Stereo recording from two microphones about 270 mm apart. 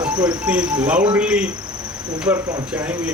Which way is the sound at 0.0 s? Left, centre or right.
Centre.